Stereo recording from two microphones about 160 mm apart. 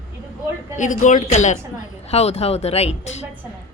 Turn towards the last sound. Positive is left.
turn(degrees=45)  # may be behind; listen again after turning